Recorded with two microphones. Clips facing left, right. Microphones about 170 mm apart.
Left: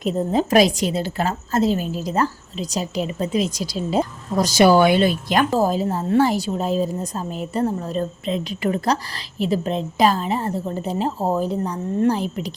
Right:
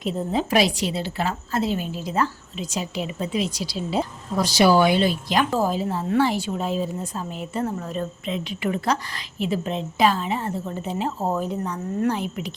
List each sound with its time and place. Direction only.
0.0 s a woman's voice: 45° left (ahead or behind)
5.5 s a woman's voice: 40° left (ahead or behind)